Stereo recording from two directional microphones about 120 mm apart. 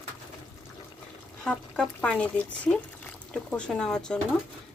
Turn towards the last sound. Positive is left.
turn(degrees=5)  # may be behind; listen again after turning